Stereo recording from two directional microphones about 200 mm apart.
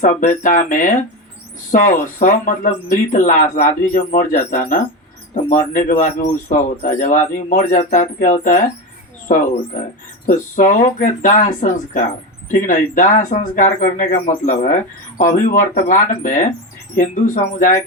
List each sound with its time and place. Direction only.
0.0 s speech: 40° left (ahead or behind)